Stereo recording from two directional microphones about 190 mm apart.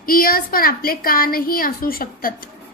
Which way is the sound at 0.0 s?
50° left (ahead or behind).